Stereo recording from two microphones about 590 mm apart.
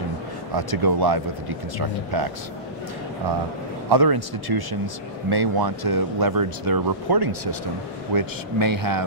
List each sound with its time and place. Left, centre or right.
0.6 s speech: right
3.9 s speech: right